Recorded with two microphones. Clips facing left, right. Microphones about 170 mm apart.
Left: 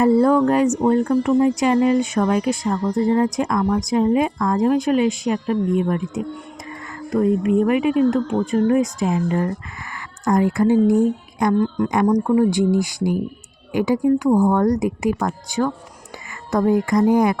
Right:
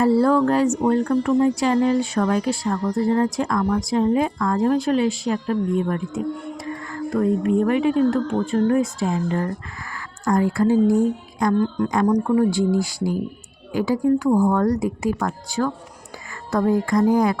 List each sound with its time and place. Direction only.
0.0 s speech: 20° left (ahead or behind)